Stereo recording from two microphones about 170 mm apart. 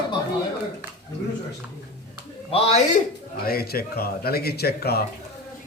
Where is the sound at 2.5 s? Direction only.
35° left (ahead or behind).